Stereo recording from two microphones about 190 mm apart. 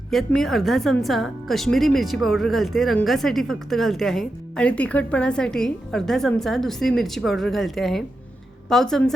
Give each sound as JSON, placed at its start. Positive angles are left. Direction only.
{"t": 0.1, "sound": "a woman's voice", "side_deg": 0}